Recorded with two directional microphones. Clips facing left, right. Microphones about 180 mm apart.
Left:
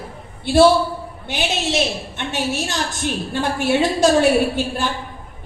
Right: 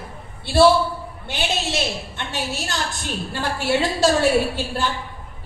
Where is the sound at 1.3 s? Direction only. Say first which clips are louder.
Left 3 dB; 20° left (ahead or behind).